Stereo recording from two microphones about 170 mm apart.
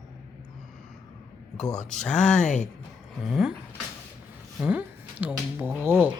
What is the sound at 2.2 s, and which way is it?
Speech, 45° left (ahead or behind).